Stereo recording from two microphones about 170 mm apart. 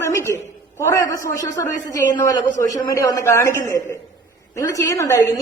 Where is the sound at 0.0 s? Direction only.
15° left (ahead or behind).